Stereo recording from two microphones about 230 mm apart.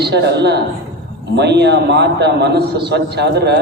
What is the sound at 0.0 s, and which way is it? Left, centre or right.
A man's voice, right.